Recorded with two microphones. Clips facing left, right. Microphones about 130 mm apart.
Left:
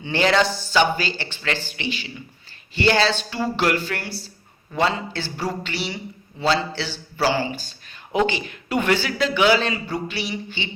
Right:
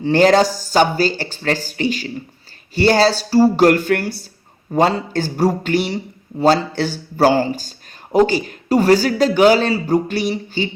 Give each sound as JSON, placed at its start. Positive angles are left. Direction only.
{"t": 0.0, "sound": "a man's voice", "side_deg": -40}